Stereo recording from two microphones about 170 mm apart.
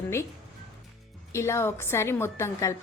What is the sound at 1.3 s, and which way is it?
A woman's voice, 15° left (ahead or behind).